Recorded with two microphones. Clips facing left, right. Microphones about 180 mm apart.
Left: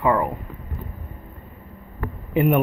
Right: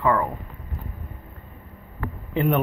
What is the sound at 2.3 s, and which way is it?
Speech, 10° left (ahead or behind).